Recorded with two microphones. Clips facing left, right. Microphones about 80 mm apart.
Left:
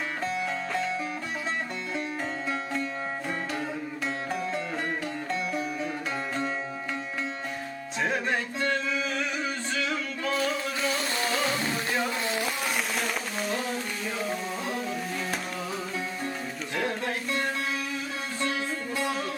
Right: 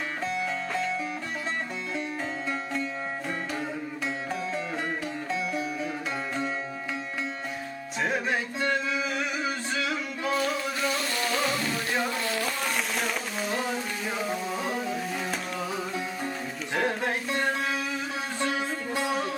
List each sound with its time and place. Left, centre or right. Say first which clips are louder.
0.3 s music: right 1 dB; centre
5.3 s music: right 1 dB; centre
8.0 s a sound: even; centre
10.9 s music: even; left
12.2 s a sound: even; centre
12.6 s a sound: even; centre
16.7 s music: right 3 dB; right
17.2 s music: right 1 dB; centre
18.3 s music: right 1 dB; centre